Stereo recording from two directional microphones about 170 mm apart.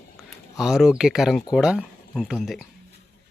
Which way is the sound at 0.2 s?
Centre (ahead or behind).